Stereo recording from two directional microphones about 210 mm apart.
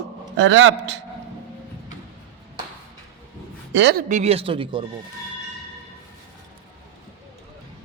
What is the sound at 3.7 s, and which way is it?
Speech, 55° right (ahead or behind).